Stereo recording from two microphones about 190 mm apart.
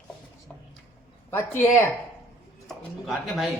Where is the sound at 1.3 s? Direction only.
10° left (ahead or behind).